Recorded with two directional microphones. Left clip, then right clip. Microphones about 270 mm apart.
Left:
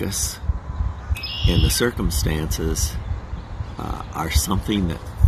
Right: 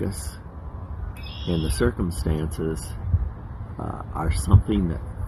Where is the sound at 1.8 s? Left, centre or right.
Centre.